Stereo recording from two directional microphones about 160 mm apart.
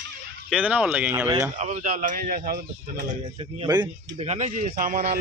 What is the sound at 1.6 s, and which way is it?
A man's voice, 45° right (ahead or behind).